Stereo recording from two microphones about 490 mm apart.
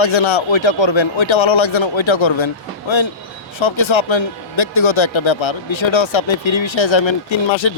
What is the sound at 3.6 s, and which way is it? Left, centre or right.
Speech, left.